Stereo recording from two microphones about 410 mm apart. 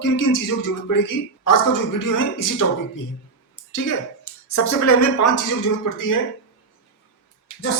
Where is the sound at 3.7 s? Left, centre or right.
Left.